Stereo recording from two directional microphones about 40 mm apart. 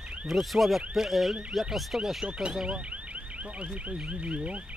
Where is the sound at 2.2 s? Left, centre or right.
Right.